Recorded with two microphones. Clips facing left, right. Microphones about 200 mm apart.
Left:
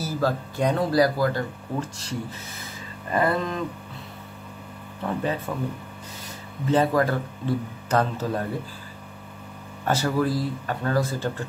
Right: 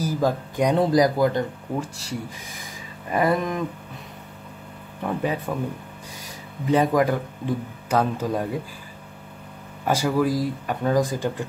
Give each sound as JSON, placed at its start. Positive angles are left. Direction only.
{"t": 0.0, "sound": "speech", "side_deg": -15}
{"t": 1.8, "sound": "speech", "side_deg": -10}
{"t": 5.0, "sound": "speech", "side_deg": -15}
{"t": 6.6, "sound": "speech", "side_deg": -15}
{"t": 9.8, "sound": "speech", "side_deg": -10}